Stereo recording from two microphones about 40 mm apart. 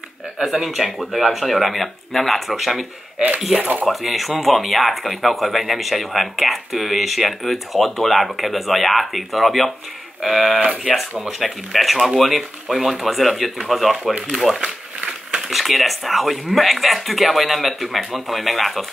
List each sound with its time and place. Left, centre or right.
0.4 s speech: centre
15.0 s a sound: centre
15.5 s speech: centre